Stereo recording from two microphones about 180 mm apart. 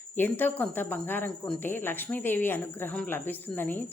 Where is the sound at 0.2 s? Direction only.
10° left (ahead or behind).